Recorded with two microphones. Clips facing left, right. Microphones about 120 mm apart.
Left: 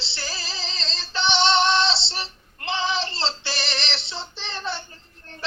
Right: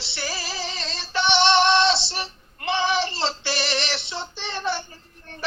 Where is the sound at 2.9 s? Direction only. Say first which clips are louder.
Right 3 dB; 25° left (ahead or behind).